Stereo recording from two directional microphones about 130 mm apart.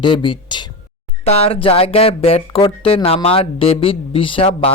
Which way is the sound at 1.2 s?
50° left (ahead or behind).